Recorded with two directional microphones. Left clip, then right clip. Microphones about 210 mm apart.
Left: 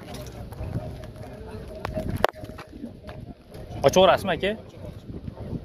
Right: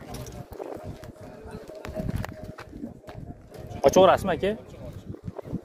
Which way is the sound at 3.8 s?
25° right (ahead or behind).